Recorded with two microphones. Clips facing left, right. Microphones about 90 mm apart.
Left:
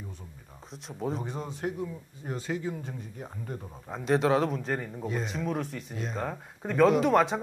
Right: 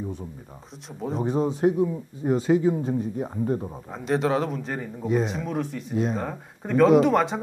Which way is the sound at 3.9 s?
Centre (ahead or behind).